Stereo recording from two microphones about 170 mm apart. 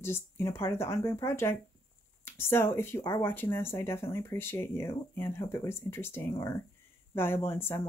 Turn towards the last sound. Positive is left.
turn(degrees=15)  # may be behind; listen again after turning